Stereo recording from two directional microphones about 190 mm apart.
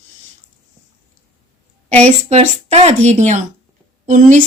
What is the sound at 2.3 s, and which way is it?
A woman's voice, 35° right (ahead or behind).